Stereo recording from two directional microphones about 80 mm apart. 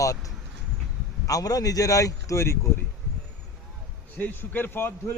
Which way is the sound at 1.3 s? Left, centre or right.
Left.